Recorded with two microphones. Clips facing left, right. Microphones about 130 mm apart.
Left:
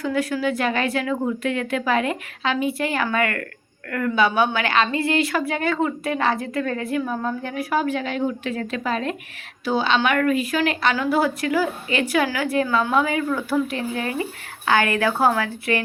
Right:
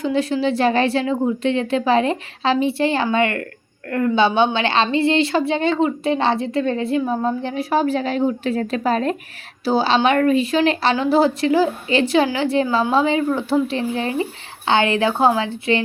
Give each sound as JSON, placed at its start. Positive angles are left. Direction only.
{"t": 0.0, "sound": "a woman's voice", "side_deg": -25}